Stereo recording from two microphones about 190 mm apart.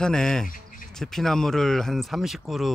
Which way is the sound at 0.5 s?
45° left (ahead or behind).